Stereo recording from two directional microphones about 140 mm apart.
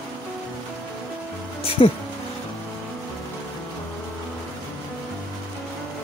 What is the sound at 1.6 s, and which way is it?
Speech, 45° left (ahead or behind).